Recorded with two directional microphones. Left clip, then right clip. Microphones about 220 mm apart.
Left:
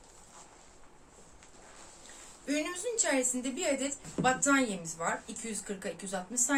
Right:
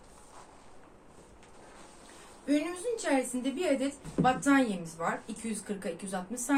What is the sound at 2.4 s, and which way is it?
A woman's voice, 45° left (ahead or behind).